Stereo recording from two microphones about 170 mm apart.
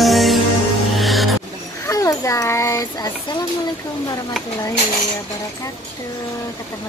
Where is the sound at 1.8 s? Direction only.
20° left (ahead or behind).